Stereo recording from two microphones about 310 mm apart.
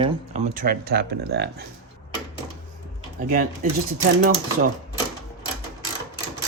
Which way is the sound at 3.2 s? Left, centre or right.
Right.